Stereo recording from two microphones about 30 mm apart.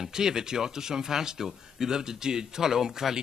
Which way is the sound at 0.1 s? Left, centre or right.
Right.